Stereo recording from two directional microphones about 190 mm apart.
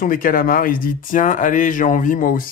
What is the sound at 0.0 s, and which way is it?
Speech, 45° left (ahead or behind).